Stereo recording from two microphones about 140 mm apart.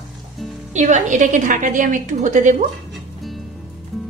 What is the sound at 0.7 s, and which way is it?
A woman's voice, 60° right (ahead or behind).